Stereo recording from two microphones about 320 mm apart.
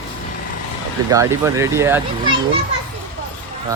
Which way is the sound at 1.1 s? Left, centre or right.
Centre.